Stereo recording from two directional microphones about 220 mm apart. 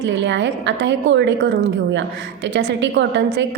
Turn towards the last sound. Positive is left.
turn(degrees=-55)  # may be behind; listen again after turning